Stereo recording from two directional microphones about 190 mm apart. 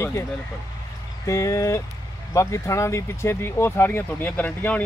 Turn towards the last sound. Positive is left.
turn(degrees=10)  # may be behind; listen again after turning